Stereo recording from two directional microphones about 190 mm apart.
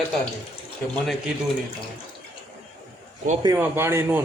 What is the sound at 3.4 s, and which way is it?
Speech, 15° right (ahead or behind).